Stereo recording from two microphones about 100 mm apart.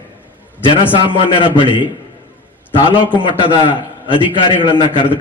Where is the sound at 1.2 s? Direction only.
60° left (ahead or behind).